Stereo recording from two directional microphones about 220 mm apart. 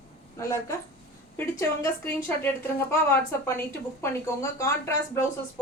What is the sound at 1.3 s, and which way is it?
A woman's voice, 10° left (ahead or behind).